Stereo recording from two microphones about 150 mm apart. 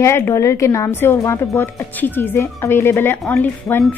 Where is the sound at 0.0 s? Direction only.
15° left (ahead or behind).